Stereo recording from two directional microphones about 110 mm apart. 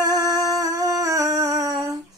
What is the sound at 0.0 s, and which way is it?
Music, 35° right (ahead or behind).